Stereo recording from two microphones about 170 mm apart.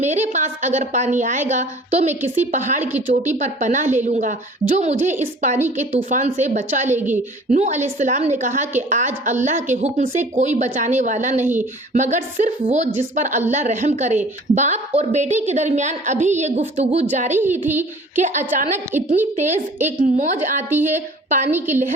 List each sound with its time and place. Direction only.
0.0 s a woman's voice: 45° right (ahead or behind)
17.4 s a woman's voice: 10° right (ahead or behind)
18.2 s a woman's voice: 45° right (ahead or behind)
18.9 s a woman's voice: 10° right (ahead or behind)
19.4 s a woman's voice: 45° right (ahead or behind)